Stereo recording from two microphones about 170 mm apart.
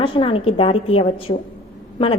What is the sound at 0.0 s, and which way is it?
A woman's voice, 35° left (ahead or behind).